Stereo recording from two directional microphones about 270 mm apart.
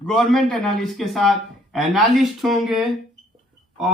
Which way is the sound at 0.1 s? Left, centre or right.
Centre.